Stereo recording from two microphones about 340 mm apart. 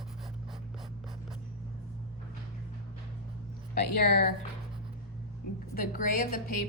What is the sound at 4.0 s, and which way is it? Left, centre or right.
Speech, left.